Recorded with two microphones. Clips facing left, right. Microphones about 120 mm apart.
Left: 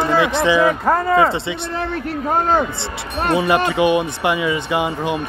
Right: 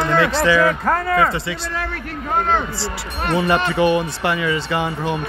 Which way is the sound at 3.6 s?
15° left (ahead or behind).